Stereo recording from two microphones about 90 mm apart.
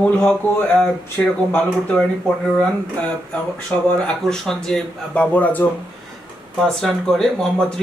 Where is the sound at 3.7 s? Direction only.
20° left (ahead or behind).